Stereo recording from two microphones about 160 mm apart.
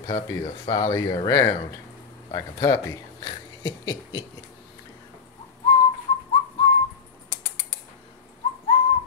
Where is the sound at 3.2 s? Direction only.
25° left (ahead or behind).